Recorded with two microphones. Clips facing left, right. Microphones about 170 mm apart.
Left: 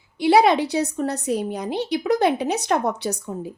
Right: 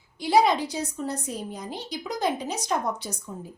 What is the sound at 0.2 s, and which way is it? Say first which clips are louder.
Speech: left 5 dB; 70° left (ahead or behind).